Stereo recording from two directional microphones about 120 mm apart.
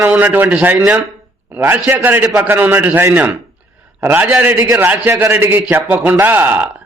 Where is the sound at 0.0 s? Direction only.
15° right (ahead or behind).